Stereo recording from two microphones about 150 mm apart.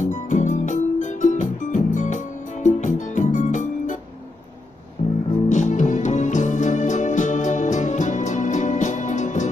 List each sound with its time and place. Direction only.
0.0 s music: 55° left (ahead or behind)
5.0 s music: 40° left (ahead or behind)
5.5 s music: 55° left (ahead or behind)